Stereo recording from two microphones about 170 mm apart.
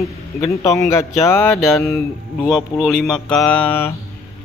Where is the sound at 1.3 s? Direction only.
10° left (ahead or behind).